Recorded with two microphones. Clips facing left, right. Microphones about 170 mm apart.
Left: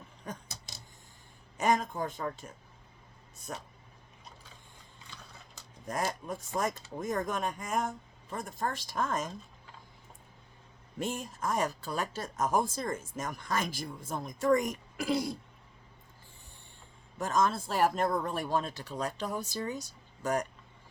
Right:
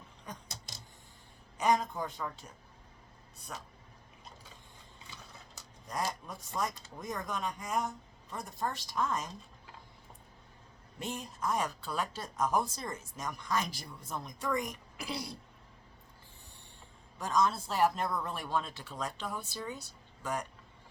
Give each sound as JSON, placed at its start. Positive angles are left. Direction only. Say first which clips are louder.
{"t": 1.5, "sound": "speech", "louder": "left 1 dB", "side_deg": 50}
{"t": 5.8, "sound": "speech", "louder": "left 3 dB", "side_deg": 50}
{"t": 11.0, "sound": "speech", "louder": "left 2 dB", "side_deg": 50}
{"t": 17.2, "sound": "speech", "louder": "left 1 dB", "side_deg": 50}